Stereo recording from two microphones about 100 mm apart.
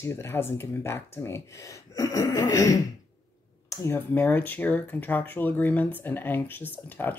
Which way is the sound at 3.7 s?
25° left (ahead or behind).